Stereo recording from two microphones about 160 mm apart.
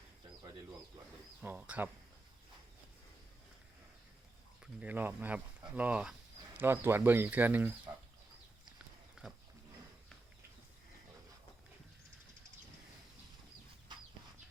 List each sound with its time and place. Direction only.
1.4 s speech: 10° right (ahead or behind)
4.6 s speech: 10° right (ahead or behind)
9.2 s roaring cats: 5° right (ahead or behind)
13.9 s chicken: 30° right (ahead or behind)